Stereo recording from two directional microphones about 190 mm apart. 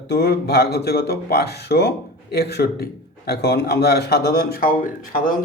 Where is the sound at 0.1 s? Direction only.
60° left (ahead or behind).